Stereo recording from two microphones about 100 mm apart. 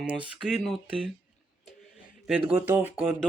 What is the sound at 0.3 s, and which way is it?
Speech, 5° right (ahead or behind).